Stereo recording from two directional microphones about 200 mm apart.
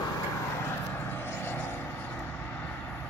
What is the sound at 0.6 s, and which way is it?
Vehicle, 10° left (ahead or behind).